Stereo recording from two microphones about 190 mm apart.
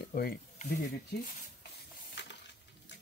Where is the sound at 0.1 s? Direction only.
55° left (ahead or behind).